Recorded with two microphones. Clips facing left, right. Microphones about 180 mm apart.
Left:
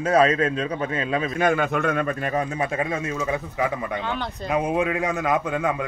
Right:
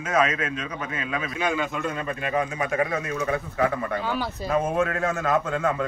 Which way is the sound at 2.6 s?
25° left (ahead or behind).